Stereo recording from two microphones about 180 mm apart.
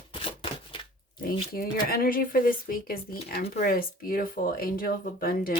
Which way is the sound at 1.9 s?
50° left (ahead or behind).